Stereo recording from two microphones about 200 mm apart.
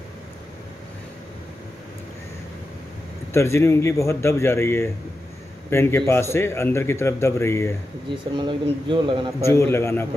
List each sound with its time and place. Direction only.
3.3 s a man's voice: 15° left (ahead or behind)
8.1 s speech: 25° right (ahead or behind)
9.4 s a man's voice: 15° left (ahead or behind)